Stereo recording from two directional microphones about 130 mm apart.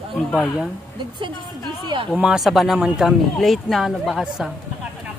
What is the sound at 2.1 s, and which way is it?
Speech, 5° right (ahead or behind).